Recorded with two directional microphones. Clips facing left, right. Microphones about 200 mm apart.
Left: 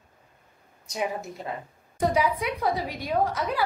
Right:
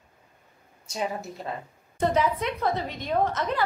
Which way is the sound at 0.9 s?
15° left (ahead or behind).